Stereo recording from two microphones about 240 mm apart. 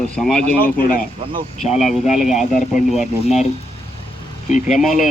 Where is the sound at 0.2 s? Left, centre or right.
Centre.